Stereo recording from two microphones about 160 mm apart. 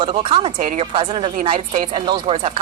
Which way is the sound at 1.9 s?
35° right (ahead or behind).